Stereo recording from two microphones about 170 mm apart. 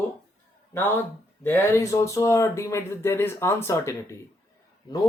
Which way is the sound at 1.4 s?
10° left (ahead or behind).